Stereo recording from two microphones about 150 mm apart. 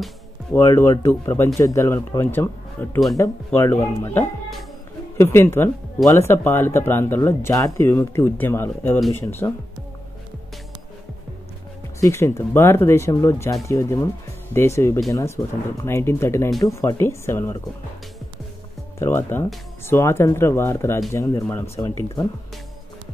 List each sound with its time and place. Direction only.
0.7 s speech: 20° left (ahead or behind)
12.0 s speech: 20° left (ahead or behind)
18.9 s speech: 15° left (ahead or behind)